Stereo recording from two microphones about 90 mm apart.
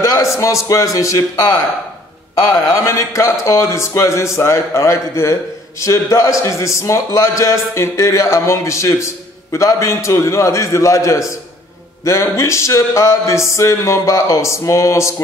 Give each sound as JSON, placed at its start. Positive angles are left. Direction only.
{"t": 0.0, "sound": "a man's voice", "side_deg": 35}